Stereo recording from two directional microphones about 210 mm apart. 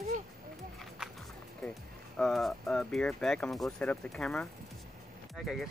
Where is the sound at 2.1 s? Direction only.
Centre (ahead or behind).